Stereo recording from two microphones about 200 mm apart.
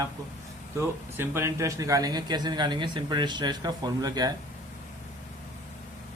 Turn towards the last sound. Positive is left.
turn(degrees=-20)  # may be behind; listen again after turning